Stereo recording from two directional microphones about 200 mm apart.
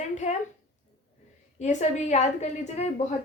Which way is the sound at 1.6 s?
35° left (ahead or behind).